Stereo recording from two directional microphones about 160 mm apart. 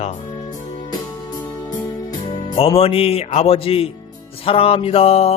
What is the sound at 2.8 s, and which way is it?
Speech, 35° left (ahead or behind).